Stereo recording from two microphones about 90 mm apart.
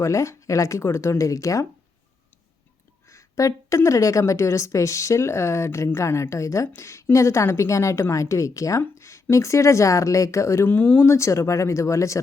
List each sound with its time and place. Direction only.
0.0 s speech: 35° left (ahead or behind)
3.1 s a sound: 40° left (ahead or behind)
3.8 s speech: 35° left (ahead or behind)
9.0 s a sound: 35° left (ahead or behind)
9.3 s speech: 35° left (ahead or behind)
10.7 s speech: 20° left (ahead or behind)